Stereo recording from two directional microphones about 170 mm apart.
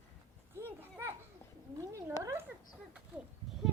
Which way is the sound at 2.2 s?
15° right (ahead or behind).